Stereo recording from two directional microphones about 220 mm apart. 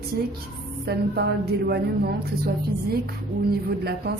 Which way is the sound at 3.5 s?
45° right (ahead or behind).